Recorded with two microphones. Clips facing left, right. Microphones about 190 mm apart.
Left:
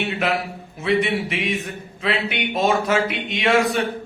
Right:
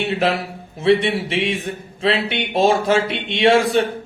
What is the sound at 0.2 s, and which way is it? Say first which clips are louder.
A man's voice: right 3 dB; 30° right (ahead or behind).